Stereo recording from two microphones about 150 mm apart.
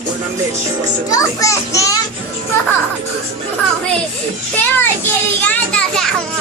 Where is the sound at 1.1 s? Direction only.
20° left (ahead or behind).